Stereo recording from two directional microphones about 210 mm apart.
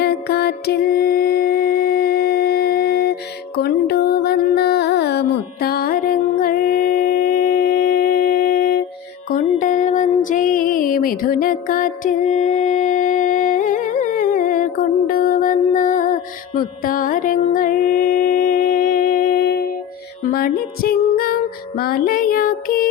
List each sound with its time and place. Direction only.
0.0 s music: 50° left (ahead or behind)